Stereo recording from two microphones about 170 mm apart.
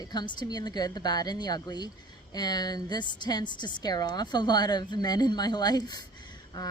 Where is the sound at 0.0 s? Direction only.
25° left (ahead or behind).